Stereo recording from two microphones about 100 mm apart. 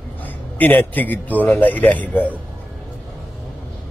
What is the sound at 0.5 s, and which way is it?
Speech, 15° left (ahead or behind).